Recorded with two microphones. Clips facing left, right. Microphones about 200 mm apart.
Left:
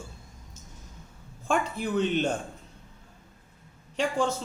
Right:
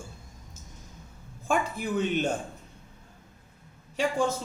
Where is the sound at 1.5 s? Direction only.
10° right (ahead or behind).